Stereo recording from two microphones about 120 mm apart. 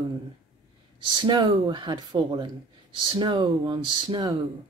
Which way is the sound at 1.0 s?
45° right (ahead or behind).